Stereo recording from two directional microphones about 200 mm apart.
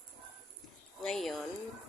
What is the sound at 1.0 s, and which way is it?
Speech, centre (ahead or behind).